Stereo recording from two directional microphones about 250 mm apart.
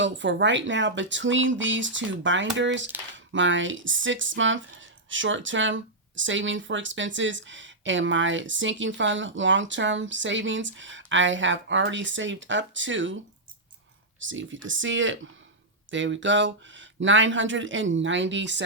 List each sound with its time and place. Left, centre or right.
0.0 s speech: right
14.2 s speech: right